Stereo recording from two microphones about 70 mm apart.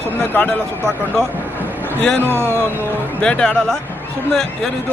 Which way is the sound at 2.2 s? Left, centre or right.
Right.